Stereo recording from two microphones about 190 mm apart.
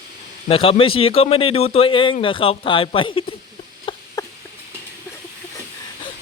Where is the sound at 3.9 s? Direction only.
25° left (ahead or behind).